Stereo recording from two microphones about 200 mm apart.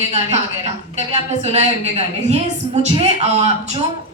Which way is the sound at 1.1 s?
35° right (ahead or behind).